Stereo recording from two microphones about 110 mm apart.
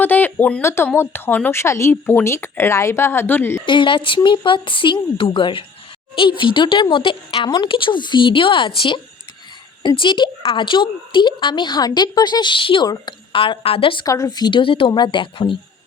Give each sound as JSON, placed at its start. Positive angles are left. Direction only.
{"t": 0.0, "sound": "speech", "side_deg": 15}
{"t": 3.7, "sound": "a woman's voice", "side_deg": 50}
{"t": 14.0, "sound": "a woman's voice", "side_deg": 35}